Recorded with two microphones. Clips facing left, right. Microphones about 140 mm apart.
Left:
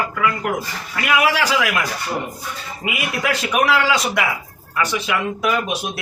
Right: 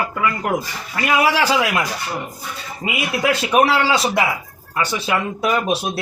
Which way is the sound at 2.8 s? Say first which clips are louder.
Right 3 dB; 25° right (ahead or behind).